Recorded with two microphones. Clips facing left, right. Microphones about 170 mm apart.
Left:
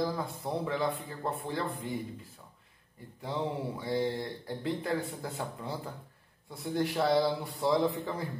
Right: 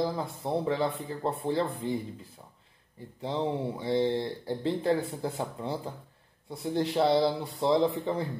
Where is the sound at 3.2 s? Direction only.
25° right (ahead or behind).